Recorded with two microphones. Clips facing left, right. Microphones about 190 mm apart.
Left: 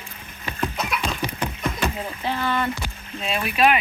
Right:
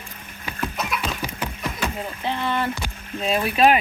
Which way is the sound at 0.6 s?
Centre (ahead or behind).